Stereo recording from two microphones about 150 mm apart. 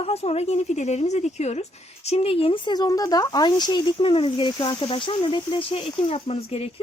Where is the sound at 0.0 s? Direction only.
45° left (ahead or behind).